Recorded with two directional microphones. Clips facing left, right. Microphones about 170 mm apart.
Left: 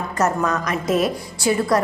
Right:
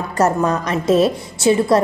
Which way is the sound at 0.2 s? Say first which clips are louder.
Right 4 dB; 30° right (ahead or behind).